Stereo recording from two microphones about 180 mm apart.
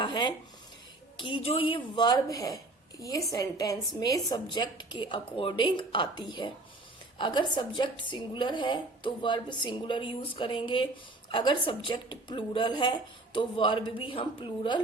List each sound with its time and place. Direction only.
0.0 s speech: 25° left (ahead or behind)